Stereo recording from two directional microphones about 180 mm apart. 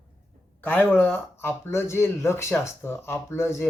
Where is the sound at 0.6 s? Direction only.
10° left (ahead or behind).